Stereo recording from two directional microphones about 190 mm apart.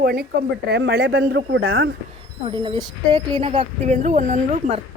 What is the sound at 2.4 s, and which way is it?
A woman's voice, 30° right (ahead or behind).